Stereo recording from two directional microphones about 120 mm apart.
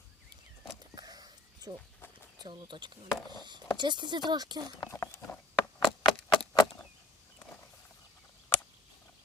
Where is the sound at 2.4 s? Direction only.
40° right (ahead or behind).